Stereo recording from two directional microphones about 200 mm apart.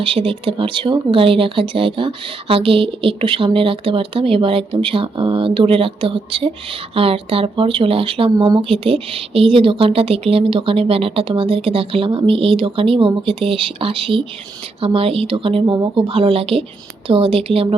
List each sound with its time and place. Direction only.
0.0 s speech: 25° right (ahead or behind)